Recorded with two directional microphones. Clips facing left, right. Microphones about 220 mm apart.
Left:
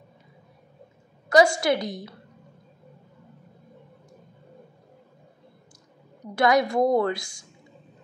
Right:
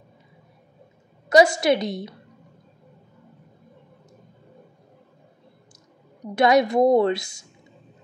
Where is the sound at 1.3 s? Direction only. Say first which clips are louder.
Right 2 dB; 20° right (ahead or behind).